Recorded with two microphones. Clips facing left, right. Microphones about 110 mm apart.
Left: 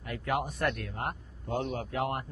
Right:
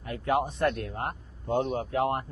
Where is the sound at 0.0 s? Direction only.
30° right (ahead or behind).